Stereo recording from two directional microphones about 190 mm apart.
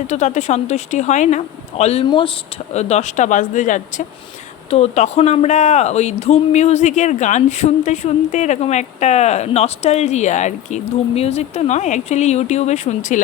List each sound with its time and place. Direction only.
0.1 s speech: 40° left (ahead or behind)